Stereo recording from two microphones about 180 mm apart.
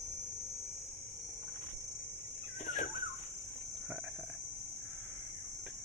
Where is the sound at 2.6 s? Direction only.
45° left (ahead or behind).